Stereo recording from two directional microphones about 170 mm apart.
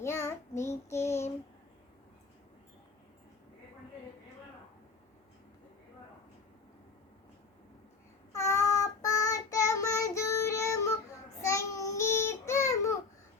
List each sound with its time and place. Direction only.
0.0 s child singing: 15° left (ahead or behind)
8.3 s child singing: 15° left (ahead or behind)